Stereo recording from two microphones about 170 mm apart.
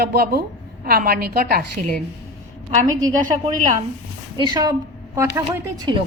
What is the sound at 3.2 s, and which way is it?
Speech, 45° right (ahead or behind).